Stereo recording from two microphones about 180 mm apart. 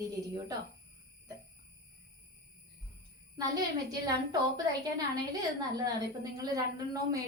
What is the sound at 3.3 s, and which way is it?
A woman's voice, 20° right (ahead or behind).